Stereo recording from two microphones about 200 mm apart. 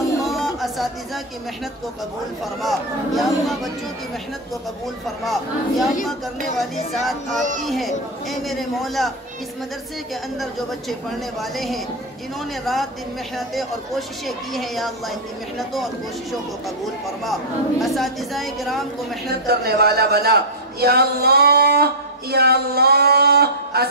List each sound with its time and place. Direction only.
0.2 s a sound: centre (ahead or behind)
2.4 s speech: centre (ahead or behind)
5.2 s speech: centre (ahead or behind)
7.6 s speech: centre (ahead or behind)
10.4 s speech: centre (ahead or behind)
19.4 s a sound: 50° right (ahead or behind)